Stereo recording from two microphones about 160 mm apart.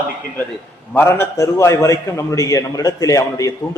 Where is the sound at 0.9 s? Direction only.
15° left (ahead or behind).